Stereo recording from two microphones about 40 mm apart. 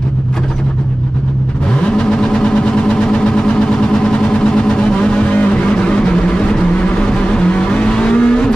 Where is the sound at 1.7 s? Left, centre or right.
Left.